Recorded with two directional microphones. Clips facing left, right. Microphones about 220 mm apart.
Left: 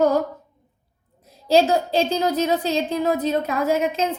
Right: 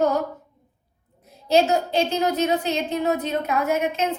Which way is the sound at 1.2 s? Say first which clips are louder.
Left 2 dB; 35° left (ahead or behind).